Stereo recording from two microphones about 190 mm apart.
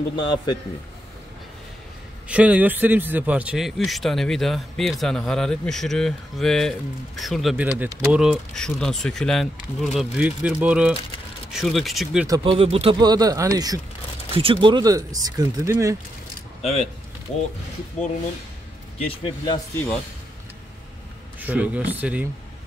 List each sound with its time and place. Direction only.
0.1 s a man's voice: 20° left (ahead or behind)
2.2 s a man's voice: 5° right (ahead or behind)
12.3 s speech: 30° right (ahead or behind)
13.0 s speech: 20° right (ahead or behind)
14.3 s speech: 30° right (ahead or behind)
18.9 s a man's voice: 25° left (ahead or behind)
21.4 s speech: 10° right (ahead or behind)